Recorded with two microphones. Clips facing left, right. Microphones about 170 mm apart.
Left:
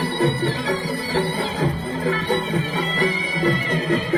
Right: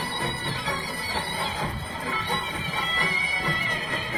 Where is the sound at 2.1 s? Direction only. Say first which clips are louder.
Left 10 dB; 70° left (ahead or behind).